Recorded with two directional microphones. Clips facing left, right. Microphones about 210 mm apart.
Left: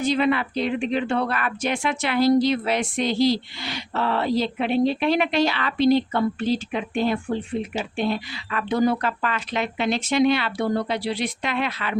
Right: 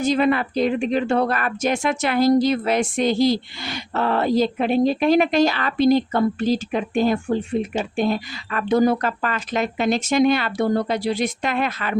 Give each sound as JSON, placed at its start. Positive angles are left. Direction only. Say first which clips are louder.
{"t": 0.0, "sound": "speech", "louder": "right 2 dB", "side_deg": -45}